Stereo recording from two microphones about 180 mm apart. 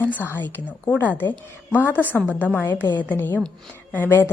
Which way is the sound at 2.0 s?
10° right (ahead or behind).